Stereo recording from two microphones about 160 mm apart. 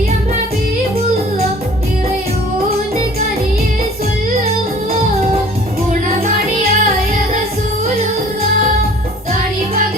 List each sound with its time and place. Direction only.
5.9 s music: 55° right (ahead or behind)